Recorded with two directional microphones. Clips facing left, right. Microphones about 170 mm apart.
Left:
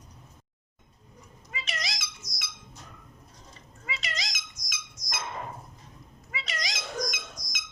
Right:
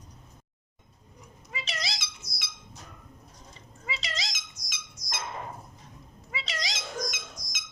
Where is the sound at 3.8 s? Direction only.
30° right (ahead or behind).